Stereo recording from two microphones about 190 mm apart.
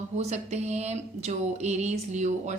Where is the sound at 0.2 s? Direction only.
35° right (ahead or behind).